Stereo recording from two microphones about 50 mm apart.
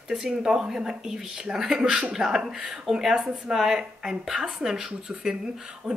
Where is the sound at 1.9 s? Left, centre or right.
Right.